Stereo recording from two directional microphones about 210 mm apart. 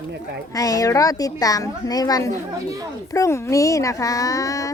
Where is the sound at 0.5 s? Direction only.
15° left (ahead or behind).